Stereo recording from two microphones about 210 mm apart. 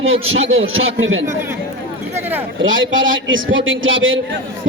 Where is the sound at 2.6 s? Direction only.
65° right (ahead or behind).